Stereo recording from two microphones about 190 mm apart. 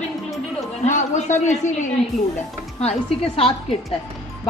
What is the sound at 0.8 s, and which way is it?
A woman's voice, 40° left (ahead or behind).